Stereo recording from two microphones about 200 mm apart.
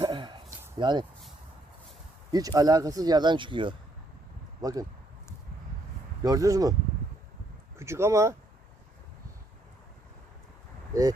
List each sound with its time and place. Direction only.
0.0 s a sound: 25° right (ahead or behind)
0.8 s speech: 20° right (ahead or behind)
2.3 s speech: 20° right (ahead or behind)
6.2 s speech: 15° right (ahead or behind)
7.8 s speech: 15° right (ahead or behind)